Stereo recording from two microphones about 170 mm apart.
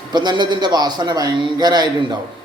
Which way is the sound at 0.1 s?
25° right (ahead or behind).